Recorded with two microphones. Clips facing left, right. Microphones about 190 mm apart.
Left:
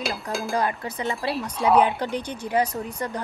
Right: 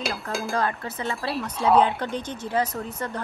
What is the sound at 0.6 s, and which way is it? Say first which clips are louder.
Speech: left 2 dB; 15° left (ahead or behind).